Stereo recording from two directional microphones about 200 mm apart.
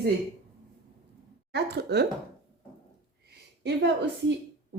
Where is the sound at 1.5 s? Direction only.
55° right (ahead or behind).